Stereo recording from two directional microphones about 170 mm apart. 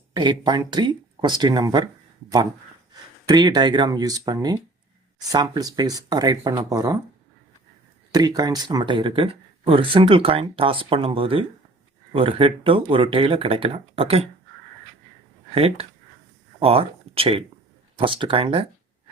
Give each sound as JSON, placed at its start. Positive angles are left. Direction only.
{"t": 0.1, "sound": "speech", "side_deg": -25}
{"t": 3.2, "sound": "speech", "side_deg": -25}
{"t": 8.1, "sound": "speech", "side_deg": -20}
{"t": 15.5, "sound": "speech", "side_deg": -35}